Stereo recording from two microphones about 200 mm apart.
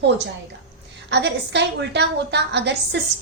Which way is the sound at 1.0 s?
60° right (ahead or behind).